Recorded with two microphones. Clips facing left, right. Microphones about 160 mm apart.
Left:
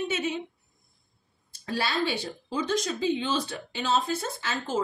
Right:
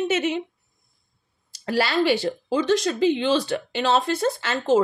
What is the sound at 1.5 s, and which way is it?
Speech, 80° right.